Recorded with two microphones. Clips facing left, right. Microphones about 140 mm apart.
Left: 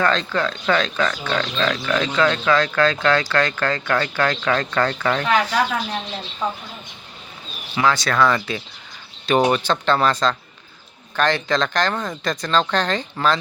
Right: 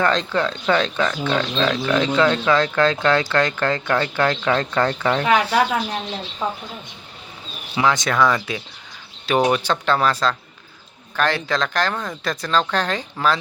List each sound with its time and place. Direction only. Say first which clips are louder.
0.0 s speech: right 1 dB; 20° right (ahead or behind)
5.4 s speech: right 2 dB; 30° right (ahead or behind)
7.8 s speech: even; 20° right (ahead or behind)